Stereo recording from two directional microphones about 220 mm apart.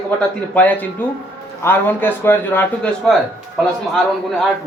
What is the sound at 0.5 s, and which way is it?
A man's voice, 5° left (ahead or behind).